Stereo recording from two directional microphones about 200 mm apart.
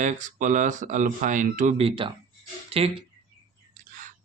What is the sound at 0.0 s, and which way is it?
Speech, 40° right (ahead or behind).